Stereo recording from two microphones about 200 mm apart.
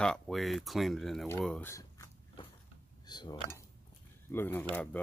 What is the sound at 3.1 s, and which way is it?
Speech, 20° left (ahead or behind).